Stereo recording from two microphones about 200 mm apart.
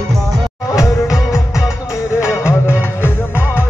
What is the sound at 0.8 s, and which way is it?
Music, 15° left (ahead or behind).